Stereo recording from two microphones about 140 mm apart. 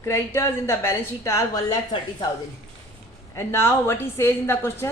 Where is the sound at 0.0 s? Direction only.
20° left (ahead or behind).